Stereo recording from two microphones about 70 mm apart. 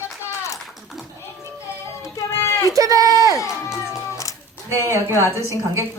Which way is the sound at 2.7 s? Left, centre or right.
Right.